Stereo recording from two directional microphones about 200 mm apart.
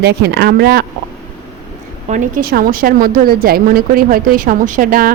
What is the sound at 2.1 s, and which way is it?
A woman's voice, 40° right (ahead or behind).